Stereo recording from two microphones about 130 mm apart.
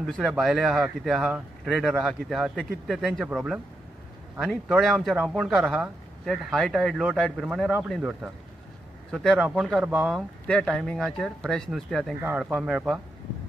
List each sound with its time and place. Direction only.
0.0 s speech: centre (ahead or behind)
8.0 s speech: 10° right (ahead or behind)
9.1 s speech: 5° left (ahead or behind)
10.4 s speech: 5° left (ahead or behind)
12.2 s speech: 15° right (ahead or behind)
12.4 s speech: 5° right (ahead or behind)